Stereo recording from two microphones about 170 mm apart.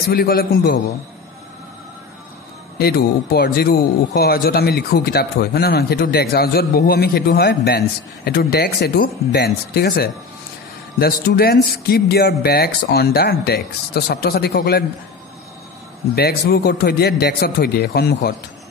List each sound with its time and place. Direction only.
0.1 s a man's voice: 60° left (ahead or behind)
2.8 s a man's voice: 65° left (ahead or behind)
16.2 s a man's voice: 65° left (ahead or behind)